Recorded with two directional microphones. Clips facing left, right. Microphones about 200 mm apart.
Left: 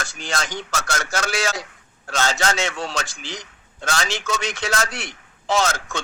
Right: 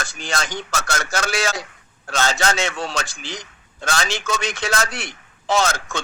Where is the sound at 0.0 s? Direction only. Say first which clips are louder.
Right 1 dB; 65° right (ahead or behind).